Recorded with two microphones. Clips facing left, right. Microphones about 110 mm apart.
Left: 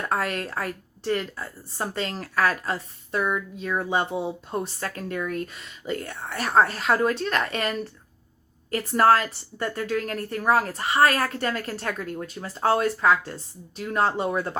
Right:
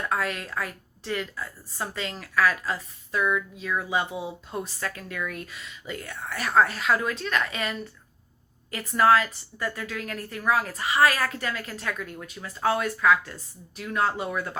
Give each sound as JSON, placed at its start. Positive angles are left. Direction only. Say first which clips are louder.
{"t": 0.1, "sound": "speech", "louder": "left 3 dB", "side_deg": 45}
{"t": 1.0, "sound": "a woman's voice", "louder": "left 4 dB", "side_deg": 35}
{"t": 8.7, "sound": "a woman's voice", "louder": "left 1 dB", "side_deg": 30}